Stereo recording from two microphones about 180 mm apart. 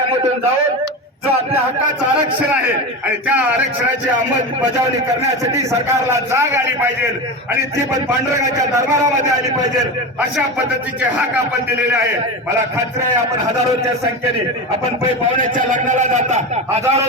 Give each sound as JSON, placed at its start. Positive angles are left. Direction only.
{"t": 5.5, "sound": "a man's voice", "side_deg": -15}
{"t": 15.4, "sound": "a man's voice", "side_deg": -45}